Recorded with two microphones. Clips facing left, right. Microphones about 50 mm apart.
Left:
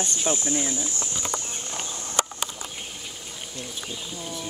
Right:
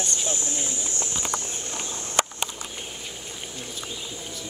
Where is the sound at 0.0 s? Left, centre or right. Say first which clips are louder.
Left 3 dB; left.